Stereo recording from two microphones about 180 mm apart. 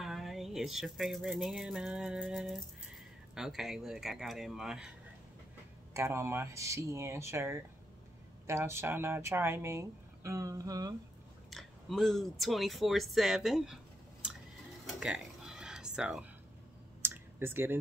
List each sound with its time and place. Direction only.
0.0 s a sound: centre (ahead or behind)
3.3 s speech: centre (ahead or behind)
5.9 s speech: 15° right (ahead or behind)
11.5 s speech: centre (ahead or behind)
14.9 s a sound: 5° right (ahead or behind)
17.0 s clicking: 15° right (ahead or behind)